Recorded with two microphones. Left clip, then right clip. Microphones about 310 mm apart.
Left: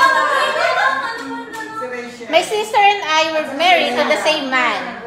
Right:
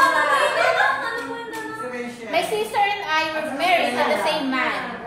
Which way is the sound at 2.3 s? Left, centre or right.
Left.